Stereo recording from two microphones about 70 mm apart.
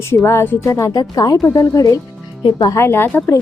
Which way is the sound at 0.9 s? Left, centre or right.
Left.